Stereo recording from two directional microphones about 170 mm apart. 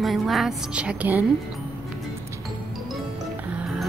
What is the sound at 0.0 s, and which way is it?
A woman's voice, centre (ahead or behind).